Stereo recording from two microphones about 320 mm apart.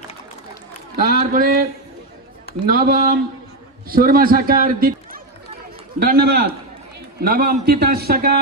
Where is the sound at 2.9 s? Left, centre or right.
Right.